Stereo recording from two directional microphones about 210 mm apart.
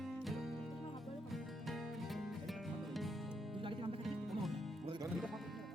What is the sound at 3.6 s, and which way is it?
Music, 25° right (ahead or behind).